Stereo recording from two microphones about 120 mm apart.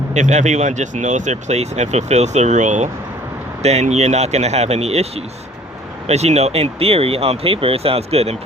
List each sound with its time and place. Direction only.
0.1 s speech: 80° right
3.6 s speech: 65° right (ahead or behind)